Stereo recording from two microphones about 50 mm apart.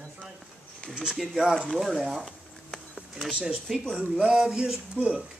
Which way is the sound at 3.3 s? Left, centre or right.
Centre.